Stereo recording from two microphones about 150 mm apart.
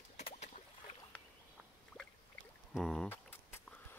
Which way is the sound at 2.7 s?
5° left (ahead or behind).